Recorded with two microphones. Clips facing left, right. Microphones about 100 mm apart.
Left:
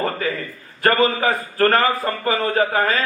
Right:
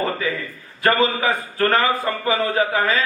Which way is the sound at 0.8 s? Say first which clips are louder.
Left 1 dB; 45° left (ahead or behind).